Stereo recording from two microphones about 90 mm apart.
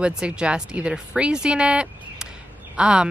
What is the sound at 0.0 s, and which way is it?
A woman's voice, 10° right (ahead or behind).